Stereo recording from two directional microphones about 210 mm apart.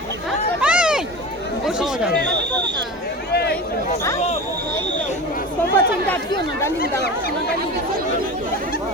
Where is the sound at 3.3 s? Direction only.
50° left (ahead or behind).